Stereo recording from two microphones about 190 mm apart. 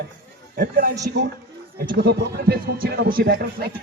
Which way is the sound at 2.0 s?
55° right (ahead or behind).